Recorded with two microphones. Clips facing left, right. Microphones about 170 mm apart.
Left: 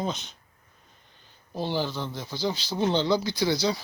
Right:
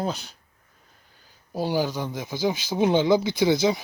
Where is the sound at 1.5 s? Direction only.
10° right (ahead or behind).